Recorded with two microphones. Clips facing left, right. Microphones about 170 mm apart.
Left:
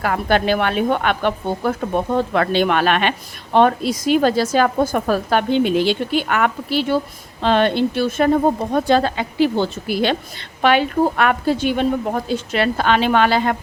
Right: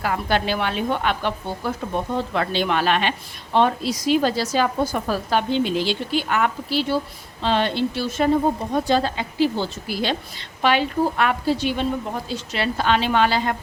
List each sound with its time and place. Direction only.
0.0 s a woman's voice: 55° left (ahead or behind)